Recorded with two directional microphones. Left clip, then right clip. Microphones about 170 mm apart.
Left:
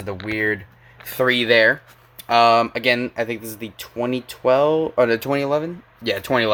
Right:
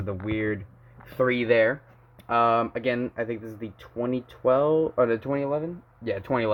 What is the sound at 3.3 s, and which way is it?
Speech, 35° left (ahead or behind).